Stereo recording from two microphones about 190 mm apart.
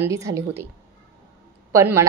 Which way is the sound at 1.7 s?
15° right (ahead or behind).